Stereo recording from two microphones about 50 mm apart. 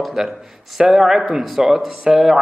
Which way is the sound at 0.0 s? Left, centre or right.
Centre.